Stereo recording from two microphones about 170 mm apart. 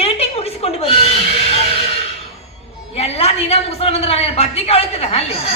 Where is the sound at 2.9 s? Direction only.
35° left (ahead or behind).